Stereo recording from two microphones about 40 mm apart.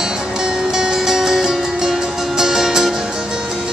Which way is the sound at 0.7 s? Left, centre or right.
Centre.